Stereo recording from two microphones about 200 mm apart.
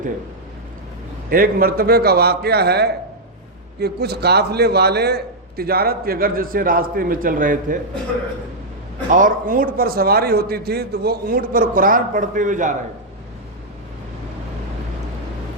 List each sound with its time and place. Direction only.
1.3 s a man's voice: 45° right (ahead or behind)
9.0 s a man's voice: 40° right (ahead or behind)